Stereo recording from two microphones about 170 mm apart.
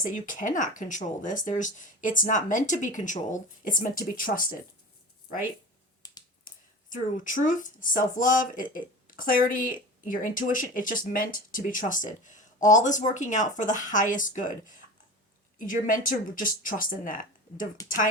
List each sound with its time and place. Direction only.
0.0 s speech: 50° left (ahead or behind)
6.0 s finger snapping: 25° left (ahead or behind)
6.9 s speech: 50° left (ahead or behind)
15.5 s speech: 50° left (ahead or behind)